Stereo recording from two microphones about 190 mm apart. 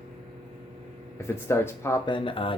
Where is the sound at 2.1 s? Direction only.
25° left (ahead or behind).